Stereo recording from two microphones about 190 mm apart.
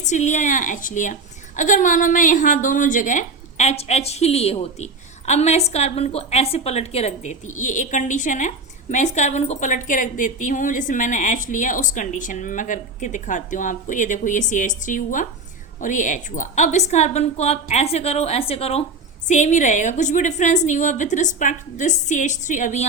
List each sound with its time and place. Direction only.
0.0 s a woman's voice: 40° left (ahead or behind)